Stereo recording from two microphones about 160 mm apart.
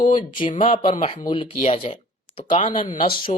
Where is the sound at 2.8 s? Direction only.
55° left (ahead or behind).